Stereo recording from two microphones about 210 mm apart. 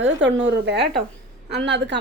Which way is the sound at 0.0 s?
60° right (ahead or behind).